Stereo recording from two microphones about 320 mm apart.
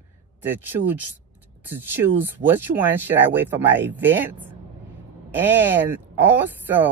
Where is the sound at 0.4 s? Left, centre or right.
Centre.